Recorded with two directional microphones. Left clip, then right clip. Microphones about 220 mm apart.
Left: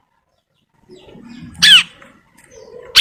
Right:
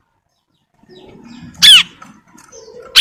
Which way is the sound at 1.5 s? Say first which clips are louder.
Right 2 dB; 5° right (ahead or behind).